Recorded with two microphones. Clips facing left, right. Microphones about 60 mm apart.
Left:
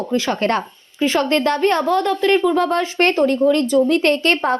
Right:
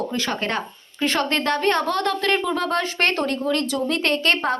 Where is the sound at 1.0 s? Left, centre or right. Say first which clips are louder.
Left 5 dB; centre.